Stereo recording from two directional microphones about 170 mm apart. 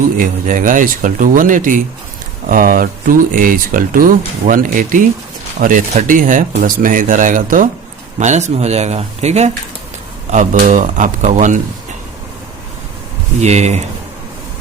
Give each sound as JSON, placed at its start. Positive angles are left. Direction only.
{"t": 0.2, "sound": "speech", "side_deg": -50}
{"t": 13.4, "sound": "speech", "side_deg": -40}